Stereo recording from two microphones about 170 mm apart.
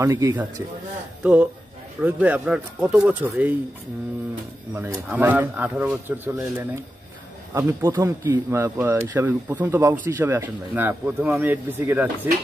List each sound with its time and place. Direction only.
0.0 s speech: 15° right (ahead or behind)
4.7 s speech: 15° right (ahead or behind)